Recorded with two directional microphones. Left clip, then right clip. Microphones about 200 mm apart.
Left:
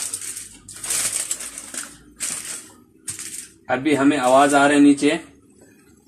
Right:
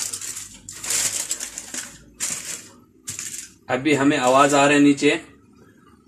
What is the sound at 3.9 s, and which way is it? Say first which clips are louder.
Speech: left 1 dB; 15° left (ahead or behind).